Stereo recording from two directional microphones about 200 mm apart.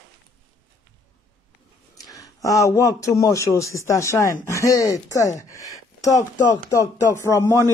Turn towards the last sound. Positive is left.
turn(degrees=15)  # may be behind; listen again after turning